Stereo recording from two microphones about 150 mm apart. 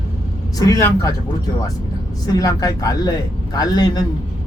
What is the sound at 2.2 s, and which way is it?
Speech, 25° left (ahead or behind).